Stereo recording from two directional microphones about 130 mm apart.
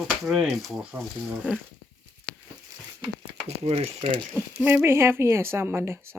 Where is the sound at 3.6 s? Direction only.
50° right (ahead or behind).